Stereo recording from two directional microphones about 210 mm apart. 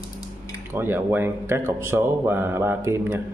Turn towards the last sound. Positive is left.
turn(degrees=-10)  # may be behind; listen again after turning